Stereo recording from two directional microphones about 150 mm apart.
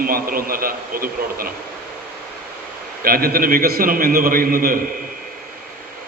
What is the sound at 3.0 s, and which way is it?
A man's voice, 75° right (ahead or behind).